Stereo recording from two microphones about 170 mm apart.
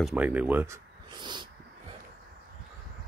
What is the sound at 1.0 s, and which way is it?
Dog, 25° right (ahead or behind).